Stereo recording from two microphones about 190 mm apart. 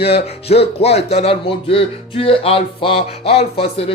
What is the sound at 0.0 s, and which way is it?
Speech, 30° left (ahead or behind).